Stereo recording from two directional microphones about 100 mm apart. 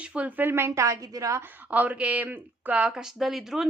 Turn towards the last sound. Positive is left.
turn(degrees=0)  # may be behind; listen again after turning